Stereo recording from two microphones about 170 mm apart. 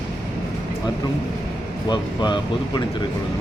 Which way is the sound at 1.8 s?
25° left (ahead or behind).